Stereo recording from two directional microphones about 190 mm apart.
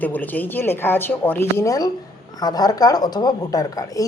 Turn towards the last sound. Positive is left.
turn(degrees=20)  # may be behind; listen again after turning